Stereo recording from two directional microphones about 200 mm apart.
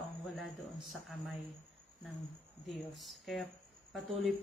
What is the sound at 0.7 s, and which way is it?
Speech, centre (ahead or behind).